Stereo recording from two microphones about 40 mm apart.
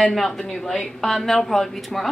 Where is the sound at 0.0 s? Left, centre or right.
Centre.